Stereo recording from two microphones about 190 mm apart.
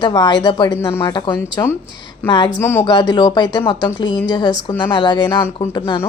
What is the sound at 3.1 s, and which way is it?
Speech, 25° left (ahead or behind).